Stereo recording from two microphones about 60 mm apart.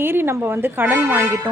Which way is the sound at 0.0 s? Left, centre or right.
Right.